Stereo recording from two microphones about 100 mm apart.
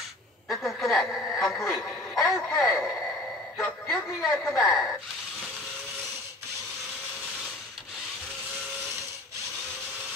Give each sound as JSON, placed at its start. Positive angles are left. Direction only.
{"t": 0.5, "sound": "a sound", "side_deg": 0}
{"t": 4.3, "sound": "a woman's voice", "side_deg": 25}
{"t": 4.6, "sound": "speech", "side_deg": 0}